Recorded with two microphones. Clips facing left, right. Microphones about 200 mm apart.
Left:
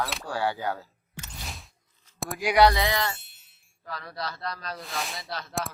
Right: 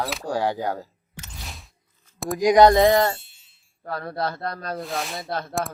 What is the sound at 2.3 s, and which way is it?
Speech, 40° right (ahead or behind).